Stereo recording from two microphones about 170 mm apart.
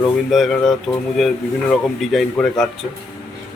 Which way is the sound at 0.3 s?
Centre (ahead or behind).